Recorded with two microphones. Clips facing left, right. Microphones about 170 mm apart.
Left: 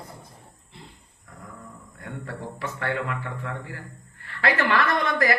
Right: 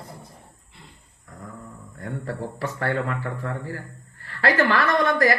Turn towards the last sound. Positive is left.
turn(degrees=-45)  # may be behind; listen again after turning